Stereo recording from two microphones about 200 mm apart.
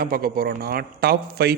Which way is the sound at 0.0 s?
45° right (ahead or behind).